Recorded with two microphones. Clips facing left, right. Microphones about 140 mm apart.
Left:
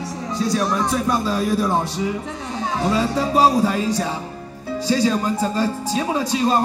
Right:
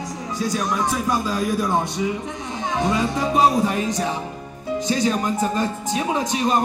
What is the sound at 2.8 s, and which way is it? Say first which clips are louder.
Music: left 2 dB; 30° left (ahead or behind).